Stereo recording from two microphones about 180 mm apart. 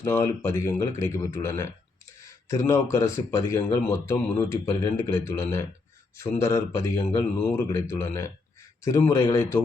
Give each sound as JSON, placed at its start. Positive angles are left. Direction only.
{"t": 0.0, "sound": "speech", "side_deg": 15}